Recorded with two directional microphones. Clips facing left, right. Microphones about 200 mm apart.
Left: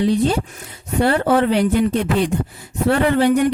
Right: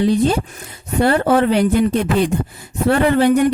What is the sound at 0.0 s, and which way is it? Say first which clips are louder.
A woman's voice: right 2 dB; 45° right (ahead or behind).